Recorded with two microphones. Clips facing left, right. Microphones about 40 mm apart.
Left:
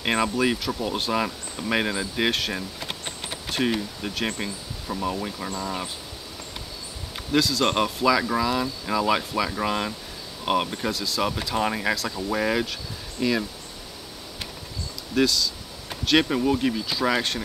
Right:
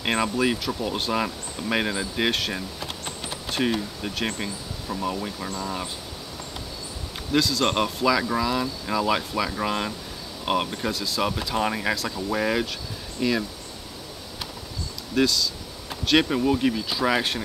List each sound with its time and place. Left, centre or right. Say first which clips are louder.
0.0 s speech: even; centre
4.0 s speech: even; centre
7.3 s speech: even; centre
15.1 s speech: even; centre